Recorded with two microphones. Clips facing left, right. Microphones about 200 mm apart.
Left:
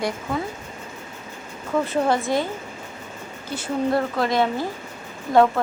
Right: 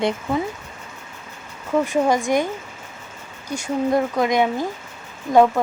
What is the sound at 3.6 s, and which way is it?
Speech, 15° right (ahead or behind).